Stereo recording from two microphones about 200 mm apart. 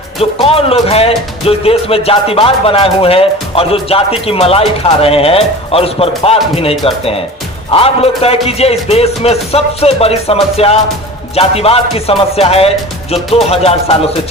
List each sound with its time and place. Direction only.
0.4 s speech: 30° left (ahead or behind)